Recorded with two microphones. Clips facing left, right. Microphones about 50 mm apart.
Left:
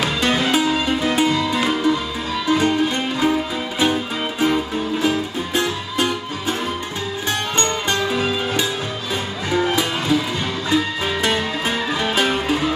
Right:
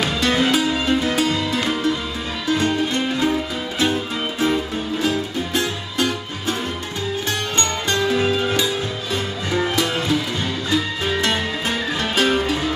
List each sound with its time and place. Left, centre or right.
0.0 s music: centre
1.0 s music: left
10.7 s music: left